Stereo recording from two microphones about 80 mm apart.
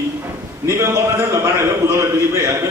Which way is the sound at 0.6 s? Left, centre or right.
Right.